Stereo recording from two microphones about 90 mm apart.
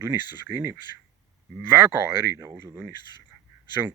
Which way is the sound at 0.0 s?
25° right (ahead or behind).